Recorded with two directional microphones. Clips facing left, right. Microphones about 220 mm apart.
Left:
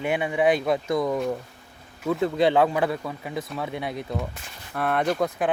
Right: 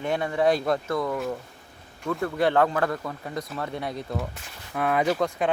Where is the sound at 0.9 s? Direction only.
15° left (ahead or behind).